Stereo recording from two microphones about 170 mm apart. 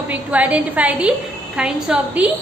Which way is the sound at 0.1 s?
10° right (ahead or behind).